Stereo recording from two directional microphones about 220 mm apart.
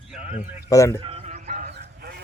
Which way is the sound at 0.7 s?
15° left (ahead or behind).